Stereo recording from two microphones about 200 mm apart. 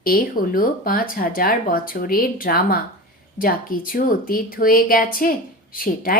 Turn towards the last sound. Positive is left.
turn(degrees=45)  # may be behind; listen again after turning